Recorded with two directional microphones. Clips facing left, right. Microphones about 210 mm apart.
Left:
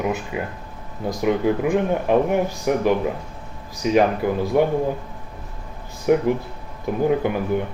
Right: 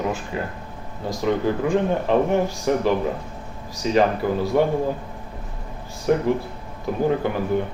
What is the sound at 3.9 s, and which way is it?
Speech, 15° left (ahead or behind).